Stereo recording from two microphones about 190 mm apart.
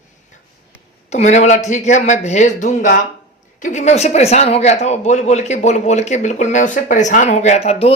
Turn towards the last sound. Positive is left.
turn(degrees=30)  # may be behind; listen again after turning